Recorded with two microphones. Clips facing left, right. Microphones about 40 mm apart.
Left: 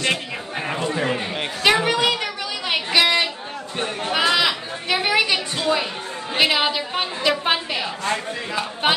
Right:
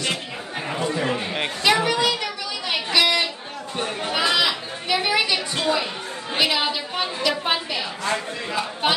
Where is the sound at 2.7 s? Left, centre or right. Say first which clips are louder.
Left 2 dB; left.